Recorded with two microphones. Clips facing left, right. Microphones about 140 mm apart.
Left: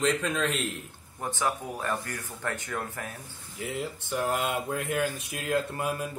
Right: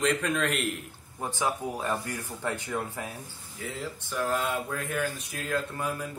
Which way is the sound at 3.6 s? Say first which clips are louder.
Left 3 dB; 15° left (ahead or behind).